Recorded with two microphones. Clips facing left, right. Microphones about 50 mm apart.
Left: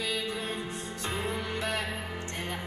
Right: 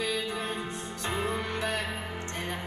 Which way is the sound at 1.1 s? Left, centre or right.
Right.